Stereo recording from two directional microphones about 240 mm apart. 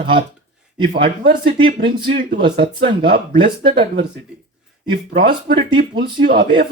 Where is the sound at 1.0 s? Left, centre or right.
Right.